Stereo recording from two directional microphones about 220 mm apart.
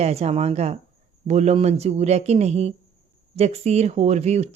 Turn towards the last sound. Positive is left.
turn(degrees=-30)  # may be behind; listen again after turning